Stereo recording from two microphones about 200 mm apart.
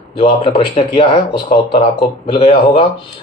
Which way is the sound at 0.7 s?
30° left (ahead or behind).